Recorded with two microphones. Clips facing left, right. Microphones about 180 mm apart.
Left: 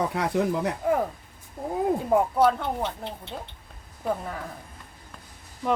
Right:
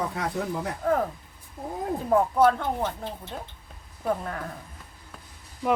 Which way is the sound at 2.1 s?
5° left (ahead or behind).